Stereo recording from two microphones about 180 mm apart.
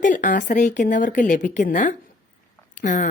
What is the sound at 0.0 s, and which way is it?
A woman's voice, 45° left (ahead or behind).